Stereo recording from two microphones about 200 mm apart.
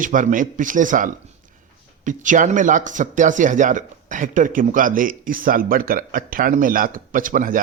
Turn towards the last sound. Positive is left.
turn(degrees=-45)  # may be behind; listen again after turning